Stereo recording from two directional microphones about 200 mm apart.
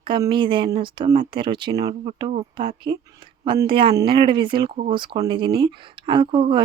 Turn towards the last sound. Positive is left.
turn(degrees=-25)  # may be behind; listen again after turning